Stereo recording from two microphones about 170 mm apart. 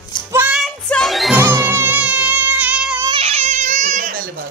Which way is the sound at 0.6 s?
Centre (ahead or behind).